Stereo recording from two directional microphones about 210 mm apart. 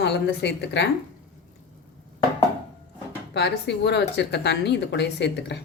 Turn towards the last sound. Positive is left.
turn(degrees=55)  # may be behind; listen again after turning